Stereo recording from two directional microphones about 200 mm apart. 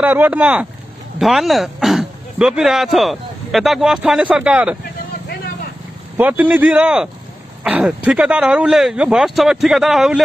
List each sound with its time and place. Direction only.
0.0 s speech: 10° right (ahead or behind)
6.1 s speech: 10° right (ahead or behind)